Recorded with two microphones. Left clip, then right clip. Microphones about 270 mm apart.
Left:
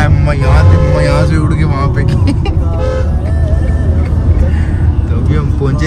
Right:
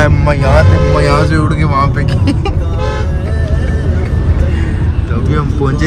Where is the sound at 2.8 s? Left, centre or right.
Left.